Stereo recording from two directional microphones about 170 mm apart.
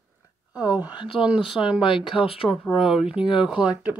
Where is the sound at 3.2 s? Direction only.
5° right (ahead or behind).